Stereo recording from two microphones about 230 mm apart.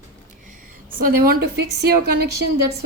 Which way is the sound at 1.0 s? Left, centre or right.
Right.